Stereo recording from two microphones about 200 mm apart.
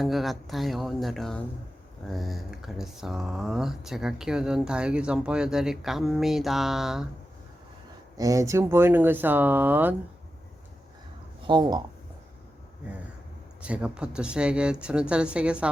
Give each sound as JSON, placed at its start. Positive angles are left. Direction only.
{"t": 0.0, "sound": "speech", "side_deg": 0}
{"t": 8.1, "sound": "speech", "side_deg": -15}
{"t": 11.4, "sound": "speech", "side_deg": -20}
{"t": 13.6, "sound": "speech", "side_deg": -5}